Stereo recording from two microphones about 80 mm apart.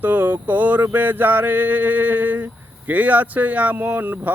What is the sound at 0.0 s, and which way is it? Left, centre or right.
Speech, right.